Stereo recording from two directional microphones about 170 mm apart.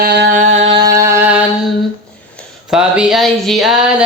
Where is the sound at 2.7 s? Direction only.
5° right (ahead or behind).